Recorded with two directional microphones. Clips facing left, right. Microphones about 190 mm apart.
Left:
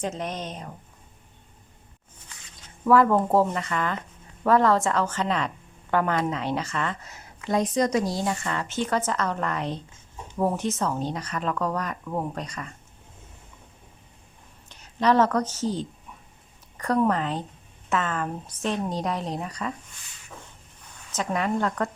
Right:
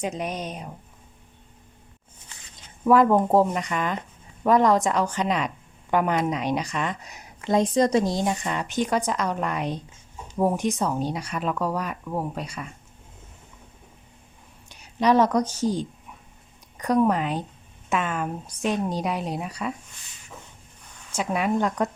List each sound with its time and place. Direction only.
0.0 s speech: 10° right (ahead or behind)
2.3 s a sound: 30° right (ahead or behind)
2.8 s speech: 15° right (ahead or behind)
14.7 s speech: 10° right (ahead or behind)
21.1 s speech: 10° right (ahead or behind)